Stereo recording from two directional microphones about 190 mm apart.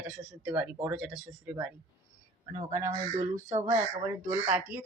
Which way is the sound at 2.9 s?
15° right (ahead or behind).